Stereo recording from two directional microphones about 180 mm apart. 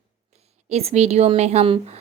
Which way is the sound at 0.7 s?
35° right (ahead or behind).